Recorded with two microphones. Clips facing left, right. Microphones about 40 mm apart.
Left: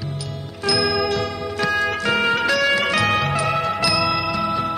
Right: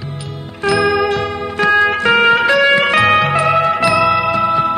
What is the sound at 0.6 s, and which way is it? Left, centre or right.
Music, right.